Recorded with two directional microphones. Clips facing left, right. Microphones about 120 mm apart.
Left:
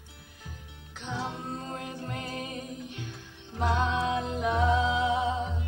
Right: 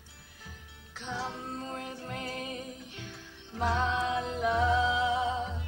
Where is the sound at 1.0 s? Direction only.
15° left (ahead or behind).